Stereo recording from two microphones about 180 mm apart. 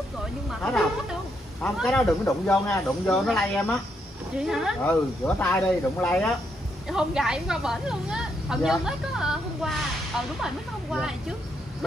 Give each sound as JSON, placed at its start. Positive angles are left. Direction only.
{"t": 0.5, "sound": "speech", "side_deg": 0}
{"t": 2.2, "sound": "speech", "side_deg": 15}
{"t": 3.1, "sound": "speech", "side_deg": 5}
{"t": 4.8, "sound": "speech", "side_deg": 10}
{"t": 6.9, "sound": "speech", "side_deg": -5}